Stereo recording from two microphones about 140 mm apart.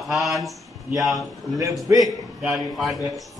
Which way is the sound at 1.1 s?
25° right (ahead or behind).